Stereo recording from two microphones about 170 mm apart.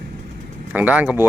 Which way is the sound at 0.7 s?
10° right (ahead or behind).